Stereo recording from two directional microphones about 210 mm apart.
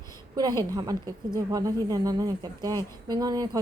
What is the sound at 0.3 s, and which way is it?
A woman's voice, 20° right (ahead or behind).